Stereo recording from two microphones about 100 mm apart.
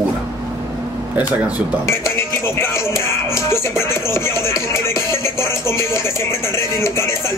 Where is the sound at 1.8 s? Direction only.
25° left (ahead or behind).